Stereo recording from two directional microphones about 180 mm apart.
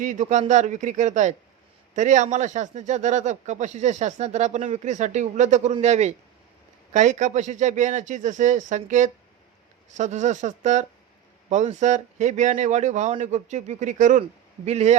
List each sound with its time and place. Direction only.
0.0 s a man's voice: 45° right (ahead or behind)